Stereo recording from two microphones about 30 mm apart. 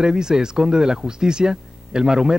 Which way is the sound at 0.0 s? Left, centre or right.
Right.